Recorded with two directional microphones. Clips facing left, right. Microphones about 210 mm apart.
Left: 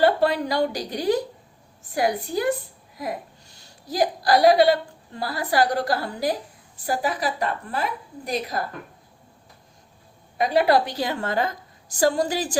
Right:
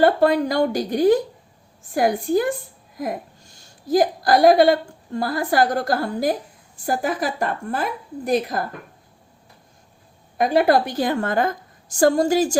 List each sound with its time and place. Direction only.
0.0 s a woman's voice: 50° right (ahead or behind)
10.3 s a woman's voice: 50° right (ahead or behind)